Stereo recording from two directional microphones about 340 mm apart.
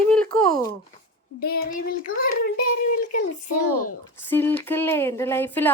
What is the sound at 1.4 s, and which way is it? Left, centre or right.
A child's voice, left.